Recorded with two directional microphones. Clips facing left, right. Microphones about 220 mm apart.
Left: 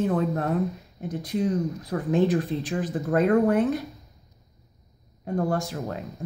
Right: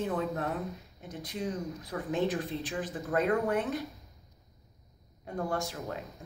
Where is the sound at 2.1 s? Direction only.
40° left (ahead or behind).